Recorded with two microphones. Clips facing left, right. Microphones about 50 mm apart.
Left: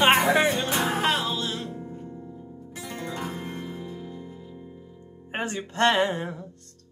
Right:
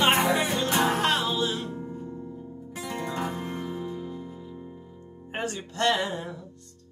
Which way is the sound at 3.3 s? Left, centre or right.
Centre.